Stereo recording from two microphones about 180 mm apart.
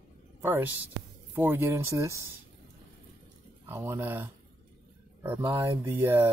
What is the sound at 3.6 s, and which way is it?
Speech, 15° right (ahead or behind).